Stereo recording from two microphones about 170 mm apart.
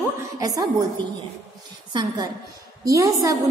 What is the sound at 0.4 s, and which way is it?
Speech, 20° right (ahead or behind).